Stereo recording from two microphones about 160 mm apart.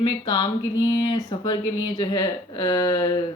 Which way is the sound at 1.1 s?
25° left (ahead or behind).